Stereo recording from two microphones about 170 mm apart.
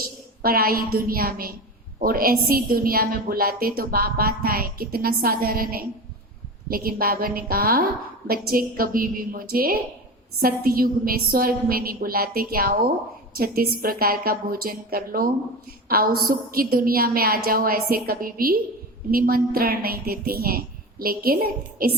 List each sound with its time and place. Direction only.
0.0 s a woman's voice: 60° right (ahead or behind)